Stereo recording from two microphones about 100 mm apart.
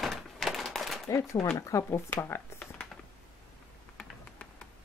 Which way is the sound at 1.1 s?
35° left (ahead or behind).